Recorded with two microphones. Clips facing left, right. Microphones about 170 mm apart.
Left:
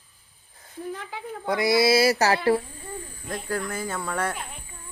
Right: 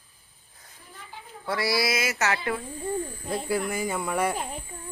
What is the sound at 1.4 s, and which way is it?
Speech, 20° left (ahead or behind).